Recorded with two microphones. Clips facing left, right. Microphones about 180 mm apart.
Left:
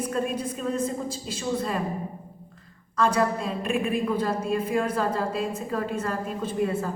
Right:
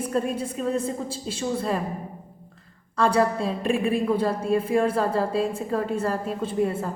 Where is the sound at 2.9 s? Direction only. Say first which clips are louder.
Right 2 dB; 30° right (ahead or behind).